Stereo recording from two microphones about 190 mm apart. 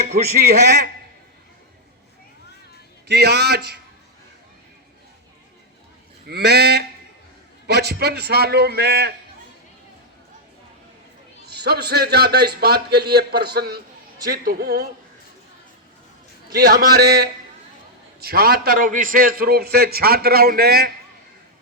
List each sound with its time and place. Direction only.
0.3 s a man's voice: 60° right (ahead or behind)
3.1 s a man's voice: 60° right (ahead or behind)
6.2 s a man's voice: 55° right (ahead or behind)
11.4 s a man's voice: 60° right (ahead or behind)
16.5 s a man's voice: 50° right (ahead or behind)